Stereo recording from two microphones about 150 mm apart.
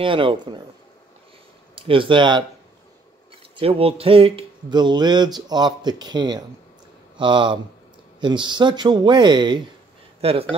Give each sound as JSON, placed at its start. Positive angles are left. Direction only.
{"t": 0.0, "sound": "speech", "side_deg": -35}
{"t": 1.8, "sound": "speech", "side_deg": -35}
{"t": 3.5, "sound": "speech", "side_deg": -40}
{"t": 10.2, "sound": "speech", "side_deg": -40}